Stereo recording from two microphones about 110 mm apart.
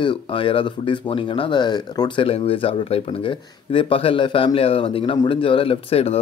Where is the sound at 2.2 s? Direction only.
55° left (ahead or behind).